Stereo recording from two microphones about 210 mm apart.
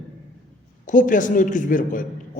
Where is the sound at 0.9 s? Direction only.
40° left (ahead or behind).